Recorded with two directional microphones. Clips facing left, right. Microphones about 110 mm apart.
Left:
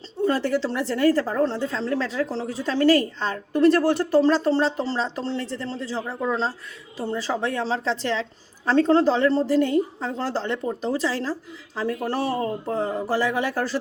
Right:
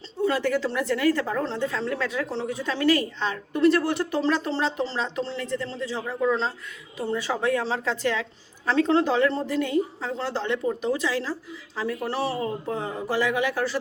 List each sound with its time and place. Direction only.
0.3 s a woman's voice: 35° left (ahead or behind)